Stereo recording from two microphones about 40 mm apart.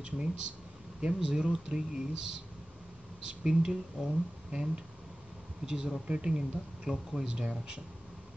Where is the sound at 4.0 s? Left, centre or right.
Centre.